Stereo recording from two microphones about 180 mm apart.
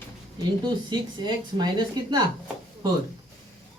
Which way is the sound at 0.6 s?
25° right (ahead or behind).